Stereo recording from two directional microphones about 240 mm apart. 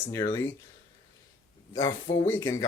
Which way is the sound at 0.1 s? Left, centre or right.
Centre.